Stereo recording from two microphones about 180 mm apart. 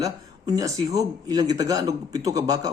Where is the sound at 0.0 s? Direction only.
20° right (ahead or behind).